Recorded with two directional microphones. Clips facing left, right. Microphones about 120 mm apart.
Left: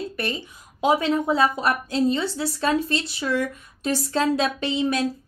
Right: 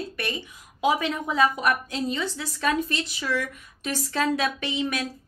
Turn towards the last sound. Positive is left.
turn(degrees=30)  # may be behind; listen again after turning